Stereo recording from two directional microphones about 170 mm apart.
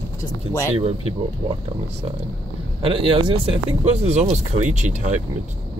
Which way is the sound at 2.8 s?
30° right (ahead or behind).